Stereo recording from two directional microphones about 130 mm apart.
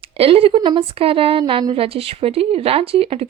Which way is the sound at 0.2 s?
45° right (ahead or behind).